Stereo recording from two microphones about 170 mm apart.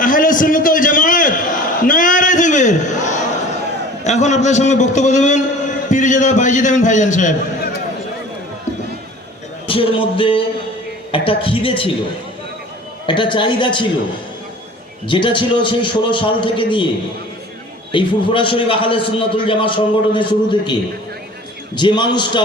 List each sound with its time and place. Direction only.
0.0 s a sound: 50° left (ahead or behind)
4.0 s a man's voice: 45° left (ahead or behind)
9.6 s a man's voice: 30° left (ahead or behind)
13.1 s a man's voice: 30° left (ahead or behind)
15.0 s a man's voice: 30° left (ahead or behind)
17.9 s a man's voice: 30° left (ahead or behind)
21.8 s a man's voice: 25° left (ahead or behind)